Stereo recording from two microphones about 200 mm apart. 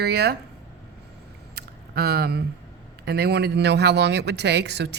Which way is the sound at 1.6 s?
55° right (ahead or behind).